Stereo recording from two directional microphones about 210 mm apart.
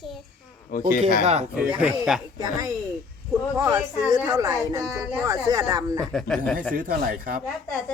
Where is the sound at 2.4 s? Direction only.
15° right (ahead or behind).